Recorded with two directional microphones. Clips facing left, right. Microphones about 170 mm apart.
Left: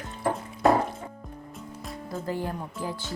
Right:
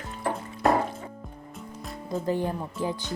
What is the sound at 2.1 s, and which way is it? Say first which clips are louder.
Speech: right 4 dB; 20° right (ahead or behind).